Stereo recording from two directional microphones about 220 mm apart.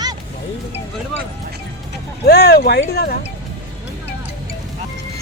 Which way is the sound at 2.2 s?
45° left (ahead or behind).